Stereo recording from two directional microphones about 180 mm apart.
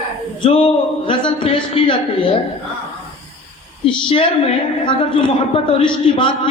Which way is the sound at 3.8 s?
30° left (ahead or behind).